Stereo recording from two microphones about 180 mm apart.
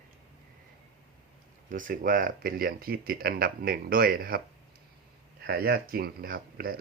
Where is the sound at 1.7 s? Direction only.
50° right (ahead or behind).